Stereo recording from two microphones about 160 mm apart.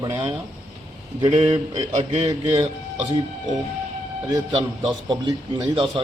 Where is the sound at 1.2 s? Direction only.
30° right (ahead or behind).